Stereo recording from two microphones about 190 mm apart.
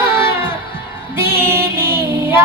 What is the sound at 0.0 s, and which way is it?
Music, 10° right (ahead or behind).